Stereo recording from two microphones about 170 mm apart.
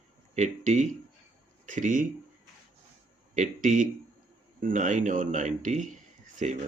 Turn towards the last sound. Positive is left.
turn(degrees=-45)  # may be behind; listen again after turning